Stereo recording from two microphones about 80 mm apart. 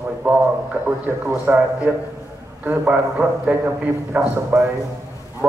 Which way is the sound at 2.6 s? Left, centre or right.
Right.